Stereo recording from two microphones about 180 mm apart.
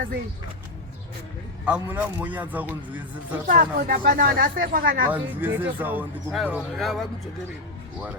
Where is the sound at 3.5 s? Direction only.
50° right (ahead or behind).